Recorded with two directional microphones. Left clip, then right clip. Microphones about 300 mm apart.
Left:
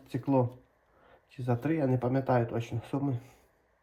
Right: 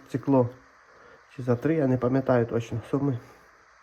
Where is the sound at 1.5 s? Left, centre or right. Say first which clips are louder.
Right 6 dB; right.